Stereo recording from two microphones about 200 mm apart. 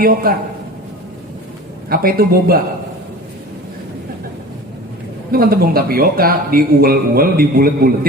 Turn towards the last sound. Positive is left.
turn(degrees=-45)  # may be behind; listen again after turning